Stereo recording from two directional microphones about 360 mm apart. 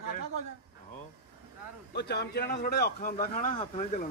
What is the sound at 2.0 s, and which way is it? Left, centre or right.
A man's voice, left.